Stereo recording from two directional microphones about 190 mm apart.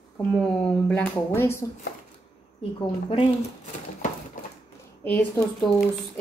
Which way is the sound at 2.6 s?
30° left (ahead or behind).